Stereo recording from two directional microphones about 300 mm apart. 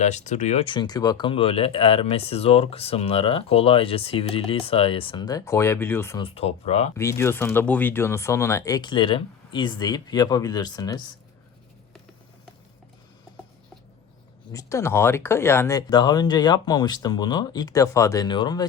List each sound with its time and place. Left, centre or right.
0.0 s speech: left
6.9 s speech: centre
14.5 s speech: centre